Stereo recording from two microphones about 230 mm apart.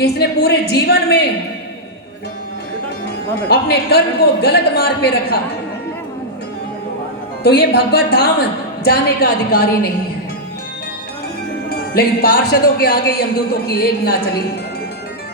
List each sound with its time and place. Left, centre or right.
0.0 s a woman's voice: left
3.5 s a woman's voice: left
7.4 s a woman's voice: left
11.9 s a woman's voice: left